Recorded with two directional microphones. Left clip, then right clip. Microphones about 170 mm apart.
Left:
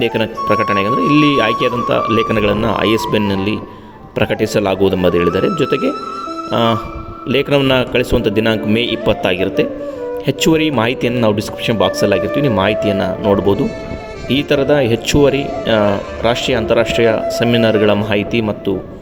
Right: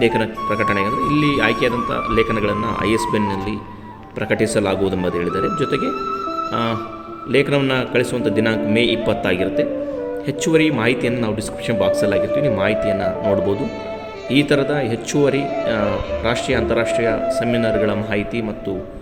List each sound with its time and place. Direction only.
0.0 s a man's voice: 50° left (ahead or behind)